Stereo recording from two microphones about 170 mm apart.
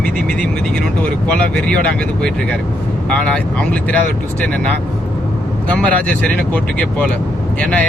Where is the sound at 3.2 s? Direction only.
5° left (ahead or behind).